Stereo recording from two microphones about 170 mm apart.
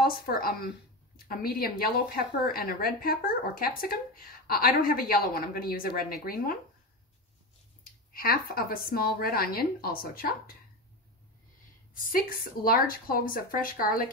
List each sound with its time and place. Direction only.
0.0 s a woman's voice: 60° left (ahead or behind)
7.8 s a woman's voice: 60° left (ahead or behind)
11.9 s a woman's voice: 55° left (ahead or behind)